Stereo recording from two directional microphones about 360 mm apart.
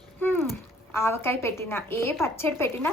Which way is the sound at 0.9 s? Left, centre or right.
Centre.